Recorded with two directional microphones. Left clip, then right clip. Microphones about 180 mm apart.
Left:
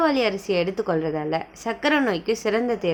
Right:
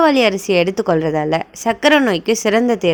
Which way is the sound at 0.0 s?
40° right (ahead or behind).